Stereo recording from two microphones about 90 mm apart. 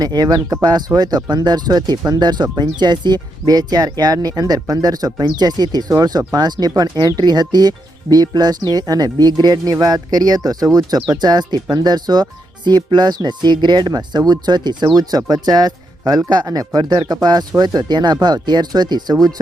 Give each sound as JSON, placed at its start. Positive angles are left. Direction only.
{"t": 0.0, "sound": "speech", "side_deg": -50}